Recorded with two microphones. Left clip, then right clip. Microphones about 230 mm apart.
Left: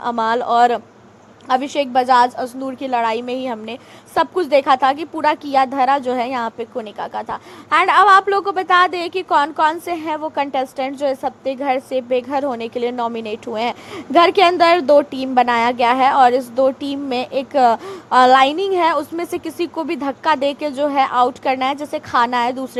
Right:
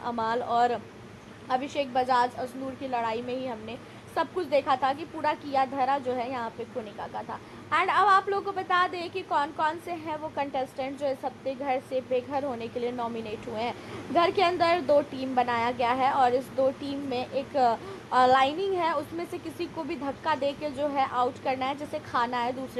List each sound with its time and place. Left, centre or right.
0.0 s a woman's voice: left